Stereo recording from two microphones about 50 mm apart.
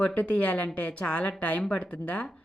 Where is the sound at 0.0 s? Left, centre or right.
Left.